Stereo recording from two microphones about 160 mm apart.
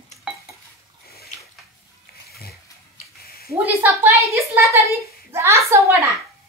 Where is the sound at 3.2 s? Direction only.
70° left (ahead or behind).